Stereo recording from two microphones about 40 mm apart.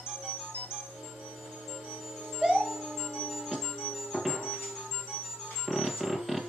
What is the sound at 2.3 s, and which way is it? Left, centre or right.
Music, centre.